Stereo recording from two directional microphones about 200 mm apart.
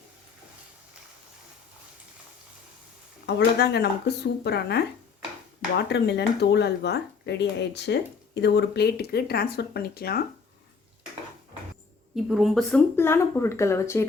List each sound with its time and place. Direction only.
3.2 s speech: 55° left (ahead or behind)
5.9 s speech: 55° left (ahead or behind)
12.1 s speech: centre (ahead or behind)
13.0 s speech: 10° left (ahead or behind)